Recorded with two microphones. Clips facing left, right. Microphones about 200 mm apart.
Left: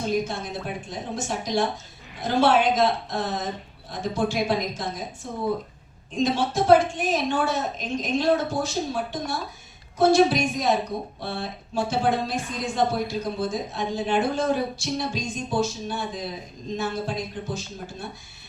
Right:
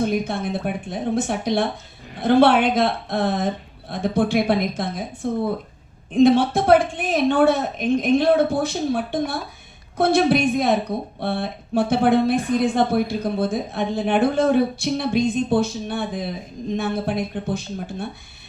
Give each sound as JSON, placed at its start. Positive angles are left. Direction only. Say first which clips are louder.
{"t": 0.0, "sound": "a woman's voice", "louder": "right 4 dB", "side_deg": -60}